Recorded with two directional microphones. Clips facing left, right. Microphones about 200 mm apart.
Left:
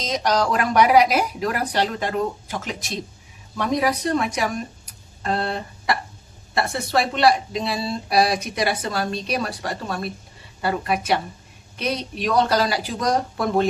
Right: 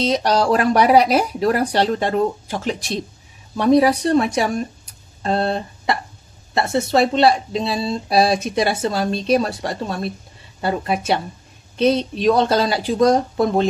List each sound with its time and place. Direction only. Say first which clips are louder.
0.0 s speech: right 4 dB; 30° right (ahead or behind)
5.2 s a sound: right 5 dB; 25° right (ahead or behind)
6.5 s a woman's voice: right 4 dB; 25° right (ahead or behind)